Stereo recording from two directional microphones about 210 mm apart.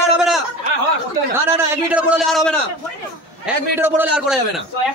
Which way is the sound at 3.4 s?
10° right (ahead or behind).